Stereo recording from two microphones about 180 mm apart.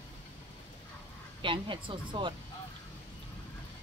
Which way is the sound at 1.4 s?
25° right (ahead or behind).